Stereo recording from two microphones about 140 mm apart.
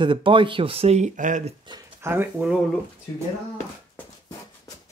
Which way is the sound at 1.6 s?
30° right (ahead or behind).